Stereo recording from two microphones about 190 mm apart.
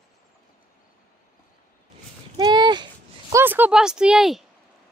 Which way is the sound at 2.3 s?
20° right (ahead or behind).